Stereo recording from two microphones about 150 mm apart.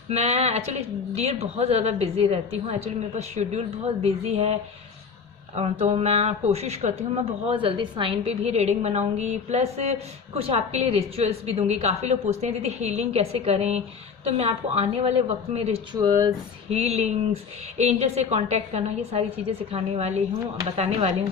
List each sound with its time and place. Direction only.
0.1 s a woman's voice: 45° right (ahead or behind)
5.5 s a woman's voice: 45° right (ahead or behind)
7.4 s a woman's voice: 35° right (ahead or behind)
15.9 s speech: 30° right (ahead or behind)
16.6 s a woman's voice: 45° right (ahead or behind)